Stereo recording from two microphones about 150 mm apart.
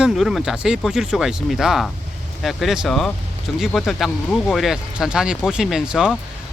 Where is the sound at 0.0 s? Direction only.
Centre (ahead or behind).